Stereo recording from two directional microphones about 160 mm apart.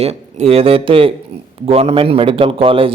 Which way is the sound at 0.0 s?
40° right (ahead or behind).